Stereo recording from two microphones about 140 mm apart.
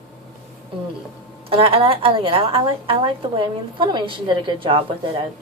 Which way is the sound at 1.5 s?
40° right (ahead or behind).